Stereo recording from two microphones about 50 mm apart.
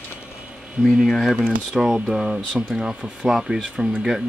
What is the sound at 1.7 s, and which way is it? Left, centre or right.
Speech, centre.